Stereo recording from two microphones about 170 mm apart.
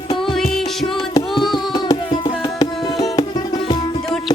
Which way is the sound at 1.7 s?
25° left (ahead or behind).